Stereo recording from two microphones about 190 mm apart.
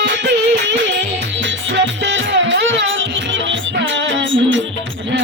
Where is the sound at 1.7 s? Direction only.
70° right (ahead or behind).